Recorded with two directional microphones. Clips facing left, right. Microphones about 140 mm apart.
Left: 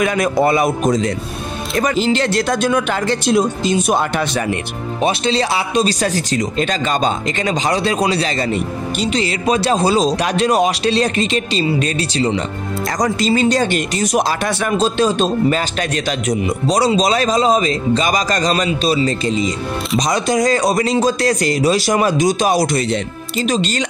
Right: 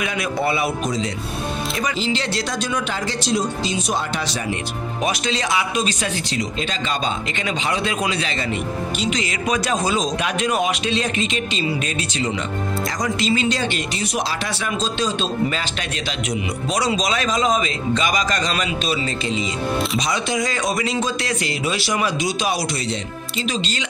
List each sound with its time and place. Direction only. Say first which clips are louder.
0.0 s speech: left 7 dB; 45° left (ahead or behind)
5.0 s speech: left 6 dB; 30° left (ahead or behind)